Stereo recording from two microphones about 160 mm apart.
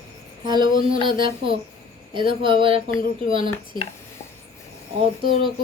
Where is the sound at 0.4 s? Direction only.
25° right (ahead or behind).